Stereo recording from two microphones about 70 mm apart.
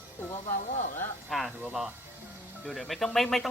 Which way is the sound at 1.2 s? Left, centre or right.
Centre.